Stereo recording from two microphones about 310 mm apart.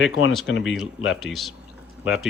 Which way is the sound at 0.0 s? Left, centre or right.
Left.